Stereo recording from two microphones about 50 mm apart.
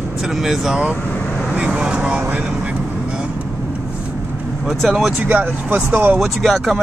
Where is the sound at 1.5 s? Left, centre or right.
Right.